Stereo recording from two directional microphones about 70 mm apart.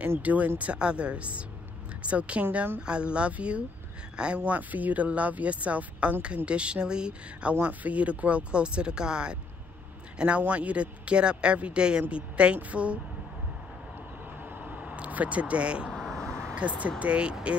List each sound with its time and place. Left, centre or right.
0.0 s speech: right
14.6 s vehicle: right
15.9 s vehicle: centre
16.5 s speech: centre